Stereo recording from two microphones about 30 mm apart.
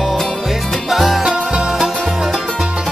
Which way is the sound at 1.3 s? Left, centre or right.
Right.